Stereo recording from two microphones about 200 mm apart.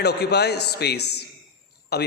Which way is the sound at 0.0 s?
55° left (ahead or behind).